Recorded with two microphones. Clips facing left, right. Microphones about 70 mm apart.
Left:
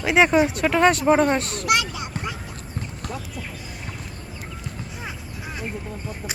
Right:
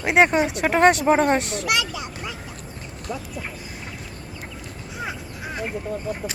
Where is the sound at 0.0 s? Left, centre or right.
Right.